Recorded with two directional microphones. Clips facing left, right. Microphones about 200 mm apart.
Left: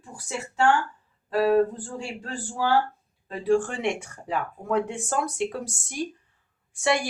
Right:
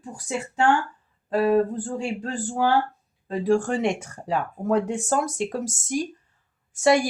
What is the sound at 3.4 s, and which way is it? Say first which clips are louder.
Speech: right 2 dB; 45° right (ahead or behind).